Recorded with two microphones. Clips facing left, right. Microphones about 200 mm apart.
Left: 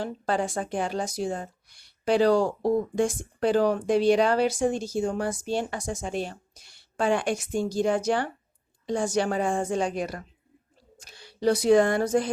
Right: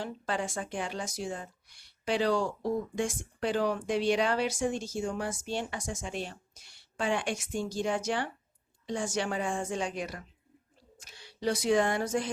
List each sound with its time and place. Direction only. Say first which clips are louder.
0.0 s speech: left 6 dB; 40° left (ahead or behind)